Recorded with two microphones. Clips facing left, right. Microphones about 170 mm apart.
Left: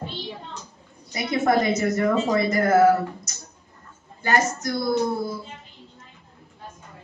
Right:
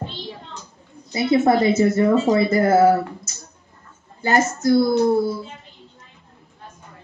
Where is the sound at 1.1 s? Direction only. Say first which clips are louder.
Right 5 dB; 25° right (ahead or behind).